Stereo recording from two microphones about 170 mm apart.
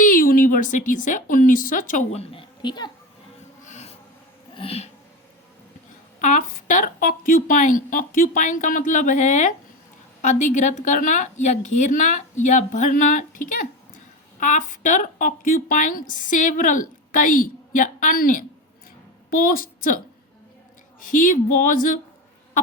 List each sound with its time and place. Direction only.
0.0 s speech: 55° left (ahead or behind)
2.3 s a woman's voice: 30° left (ahead or behind)
3.6 s a sound: 40° left (ahead or behind)
4.5 s speech: 35° left (ahead or behind)
6.1 s a woman's voice: 50° left (ahead or behind)
21.0 s speech: 50° left (ahead or behind)